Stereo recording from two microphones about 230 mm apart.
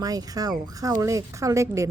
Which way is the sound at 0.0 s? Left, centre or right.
Centre.